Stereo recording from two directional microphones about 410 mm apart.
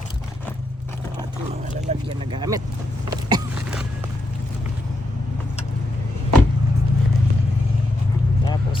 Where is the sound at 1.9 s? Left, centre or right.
Centre.